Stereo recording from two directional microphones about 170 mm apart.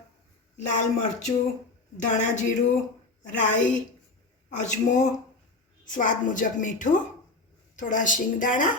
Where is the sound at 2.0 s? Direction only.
45° left (ahead or behind).